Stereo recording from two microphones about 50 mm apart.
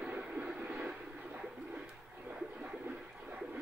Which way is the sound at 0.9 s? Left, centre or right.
Right.